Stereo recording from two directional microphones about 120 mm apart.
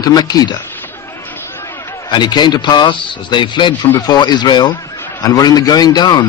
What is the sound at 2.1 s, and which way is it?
Speech, 40° left (ahead or behind).